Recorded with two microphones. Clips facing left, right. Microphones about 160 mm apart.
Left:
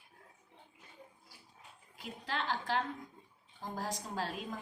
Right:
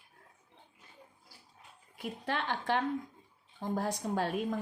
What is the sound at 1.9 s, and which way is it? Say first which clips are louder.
Speech: right 4 dB; 60° right (ahead or behind).